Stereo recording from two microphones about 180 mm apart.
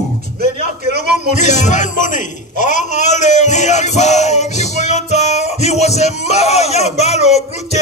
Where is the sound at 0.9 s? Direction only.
60° right (ahead or behind).